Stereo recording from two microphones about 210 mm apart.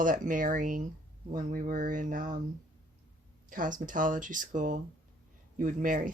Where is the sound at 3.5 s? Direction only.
40° right (ahead or behind).